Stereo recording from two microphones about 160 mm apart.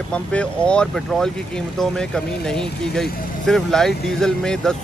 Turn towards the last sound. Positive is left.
turn(degrees=5)  # may be behind; listen again after turning